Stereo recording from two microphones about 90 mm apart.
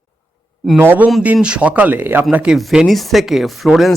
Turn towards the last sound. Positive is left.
turn(degrees=0)  # may be behind; listen again after turning